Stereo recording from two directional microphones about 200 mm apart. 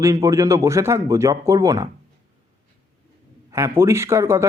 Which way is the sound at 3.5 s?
15° right (ahead or behind).